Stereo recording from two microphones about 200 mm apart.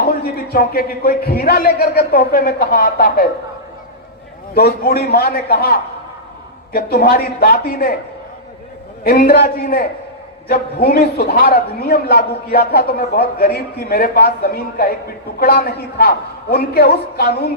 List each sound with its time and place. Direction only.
0.5 s a man's voice: 50° left (ahead or behind)
4.5 s a man's voice: 50° left (ahead or behind)
9.0 s a man's voice: 45° left (ahead or behind)